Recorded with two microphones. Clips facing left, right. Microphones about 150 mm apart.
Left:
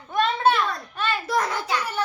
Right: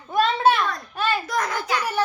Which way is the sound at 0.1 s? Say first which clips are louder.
Right 2 dB; 5° right (ahead or behind).